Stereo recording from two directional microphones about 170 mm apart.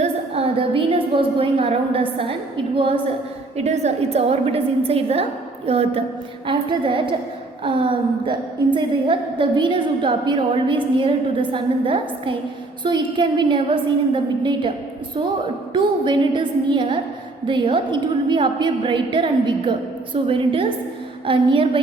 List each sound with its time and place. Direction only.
0.0 s a sound: 35° right (ahead or behind)
2.7 s a woman's voice: 30° right (ahead or behind)
15.7 s a woman's voice: 30° right (ahead or behind)